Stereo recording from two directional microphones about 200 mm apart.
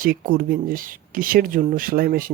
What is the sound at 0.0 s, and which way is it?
Speech, 45° right (ahead or behind).